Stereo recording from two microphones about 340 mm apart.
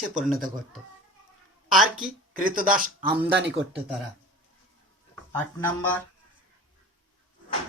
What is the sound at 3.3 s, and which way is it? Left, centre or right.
Speech, right.